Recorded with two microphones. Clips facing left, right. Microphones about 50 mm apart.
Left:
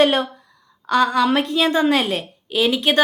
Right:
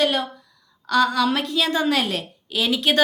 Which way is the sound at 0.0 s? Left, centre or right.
Left.